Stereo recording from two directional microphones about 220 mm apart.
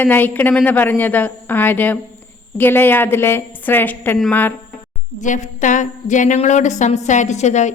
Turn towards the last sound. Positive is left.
turn(degrees=30)  # may be behind; listen again after turning